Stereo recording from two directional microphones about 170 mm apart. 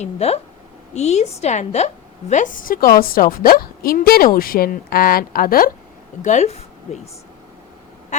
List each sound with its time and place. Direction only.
0.0 s a woman's voice: 40° left (ahead or behind); by 5.7 s 60° left (ahead or behind)
6.2 s a woman's voice: 45° left (ahead or behind)